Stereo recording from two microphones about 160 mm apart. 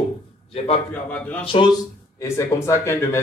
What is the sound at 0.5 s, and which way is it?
Speech, 40° left (ahead or behind).